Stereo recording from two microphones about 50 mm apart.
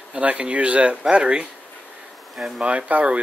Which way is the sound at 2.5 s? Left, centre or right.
Right.